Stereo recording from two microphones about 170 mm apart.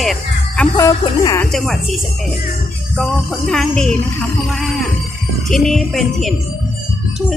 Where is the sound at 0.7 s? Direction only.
20° left (ahead or behind).